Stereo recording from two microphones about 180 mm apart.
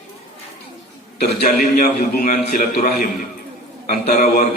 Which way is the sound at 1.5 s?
55° left (ahead or behind).